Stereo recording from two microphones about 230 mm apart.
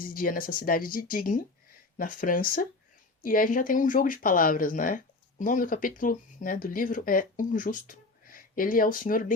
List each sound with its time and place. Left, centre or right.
0.0 s speech: left